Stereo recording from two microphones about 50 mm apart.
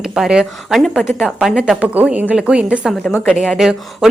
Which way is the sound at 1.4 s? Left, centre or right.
Centre.